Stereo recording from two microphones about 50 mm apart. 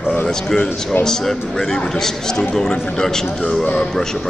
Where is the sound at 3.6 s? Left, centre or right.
Left.